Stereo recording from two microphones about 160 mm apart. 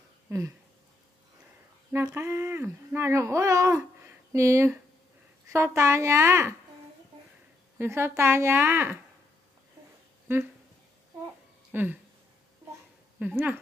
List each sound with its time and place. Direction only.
0.3 s a sound: 20° right (ahead or behind)
1.9 s speech: 15° right (ahead or behind)
7.8 s speech: 15° right (ahead or behind)
11.7 s speech: 10° right (ahead or behind)
13.2 s speech: 10° right (ahead or behind)